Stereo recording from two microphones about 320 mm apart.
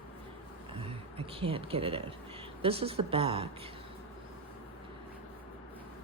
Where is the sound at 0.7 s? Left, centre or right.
Centre.